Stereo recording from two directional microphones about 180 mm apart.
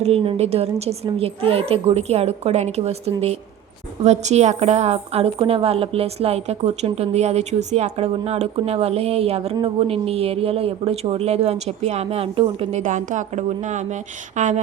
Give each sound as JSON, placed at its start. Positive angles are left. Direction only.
{"t": 0.0, "sound": "a woman's voice", "side_deg": -30}